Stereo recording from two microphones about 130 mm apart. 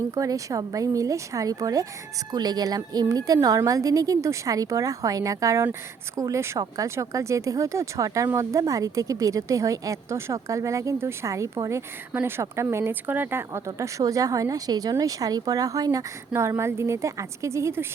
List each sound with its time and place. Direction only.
0.1 s speech: 25° right (ahead or behind)